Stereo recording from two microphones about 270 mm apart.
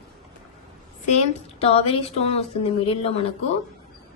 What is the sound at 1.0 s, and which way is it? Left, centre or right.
A woman's voice, left.